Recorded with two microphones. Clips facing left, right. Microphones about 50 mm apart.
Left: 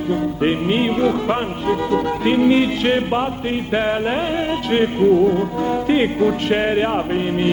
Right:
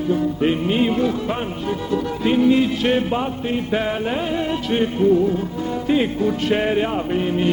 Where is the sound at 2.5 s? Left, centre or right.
Left.